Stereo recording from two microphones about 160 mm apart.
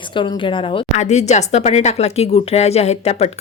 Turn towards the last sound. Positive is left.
turn(degrees=40)  # may be behind; listen again after turning